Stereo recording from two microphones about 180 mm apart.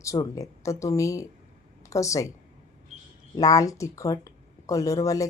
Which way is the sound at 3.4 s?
20° left (ahead or behind).